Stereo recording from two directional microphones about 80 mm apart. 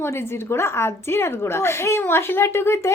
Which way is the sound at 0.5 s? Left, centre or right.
Left.